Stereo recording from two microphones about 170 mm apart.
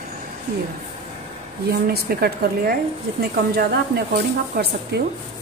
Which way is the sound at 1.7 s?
65° right (ahead or behind).